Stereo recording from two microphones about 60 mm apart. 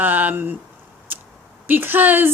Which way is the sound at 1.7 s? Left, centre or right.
Right.